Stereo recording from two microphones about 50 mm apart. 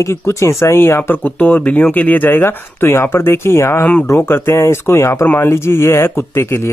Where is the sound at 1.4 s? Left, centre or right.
Left.